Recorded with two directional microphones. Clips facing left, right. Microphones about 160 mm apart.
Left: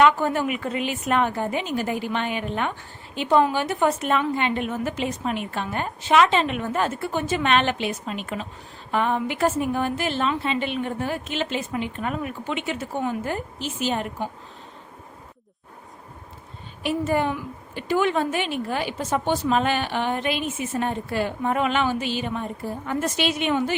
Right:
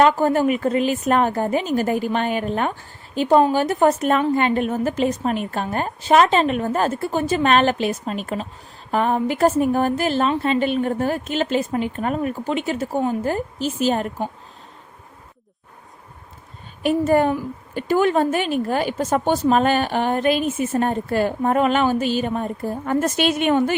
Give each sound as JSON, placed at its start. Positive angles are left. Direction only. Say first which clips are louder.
{"t": 0.0, "sound": "a woman's voice", "louder": "right 3 dB", "side_deg": -40}
{"t": 16.8, "sound": "a woman's voice", "louder": "right 6 dB", "side_deg": -45}